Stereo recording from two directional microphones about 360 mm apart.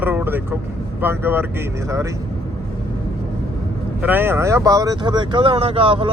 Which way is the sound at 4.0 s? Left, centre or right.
Centre.